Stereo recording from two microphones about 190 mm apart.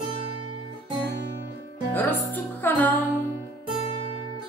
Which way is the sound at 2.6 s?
10° left (ahead or behind).